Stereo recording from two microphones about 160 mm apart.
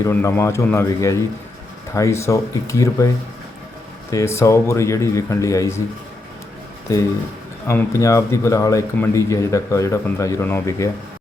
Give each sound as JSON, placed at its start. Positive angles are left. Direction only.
{"t": 0.0, "sound": "a man's voice", "side_deg": 15}
{"t": 4.1, "sound": "a man's voice", "side_deg": 20}
{"t": 7.7, "sound": "speech", "side_deg": 15}